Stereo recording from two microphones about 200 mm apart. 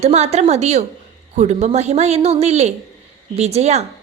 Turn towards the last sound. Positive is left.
turn(degrees=-35)  # may be behind; listen again after turning